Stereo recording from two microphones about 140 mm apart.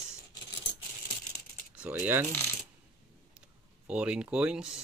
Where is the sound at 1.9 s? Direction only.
15° right (ahead or behind).